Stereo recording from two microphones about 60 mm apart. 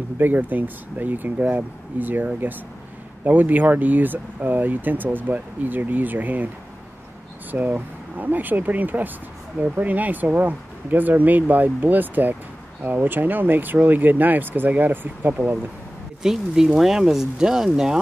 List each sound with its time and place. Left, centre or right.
0.2 s speech: right
7.5 s speech: right
16.2 s speech: centre